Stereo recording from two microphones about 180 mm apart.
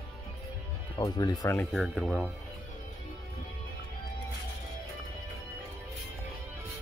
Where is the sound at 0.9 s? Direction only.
20° left (ahead or behind).